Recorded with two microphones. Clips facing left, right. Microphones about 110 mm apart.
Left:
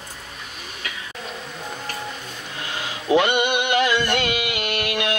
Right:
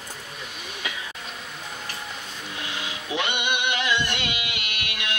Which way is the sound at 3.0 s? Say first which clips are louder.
Left 10 dB; 45° left (ahead or behind).